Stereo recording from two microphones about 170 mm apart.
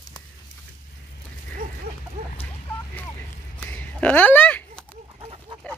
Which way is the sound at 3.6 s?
10° left (ahead or behind).